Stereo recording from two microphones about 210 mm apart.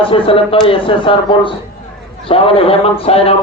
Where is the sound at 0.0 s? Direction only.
25° left (ahead or behind).